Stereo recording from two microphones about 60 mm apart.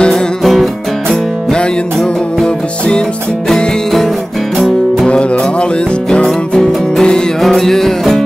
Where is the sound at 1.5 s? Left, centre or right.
Centre.